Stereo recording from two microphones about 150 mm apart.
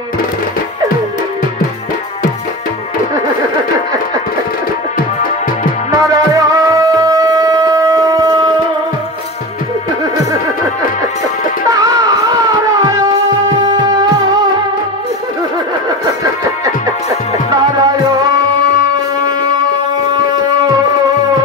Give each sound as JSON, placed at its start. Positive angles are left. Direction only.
{"t": 5.9, "sound": "music", "side_deg": -20}
{"t": 11.7, "sound": "music", "side_deg": -25}
{"t": 16.6, "sound": "music", "side_deg": -25}